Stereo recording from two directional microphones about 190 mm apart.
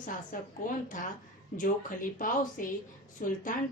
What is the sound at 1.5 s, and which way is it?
A woman's voice, 45° left (ahead or behind).